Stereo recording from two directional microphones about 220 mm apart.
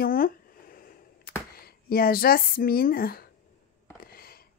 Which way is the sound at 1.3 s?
40° left (ahead or behind).